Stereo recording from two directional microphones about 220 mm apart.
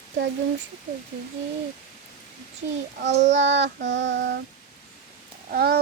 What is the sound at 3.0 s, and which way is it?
Child singing, 55° right (ahead or behind).